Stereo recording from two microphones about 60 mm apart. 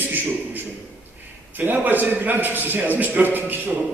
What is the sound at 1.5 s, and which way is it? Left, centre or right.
A man's voice, right.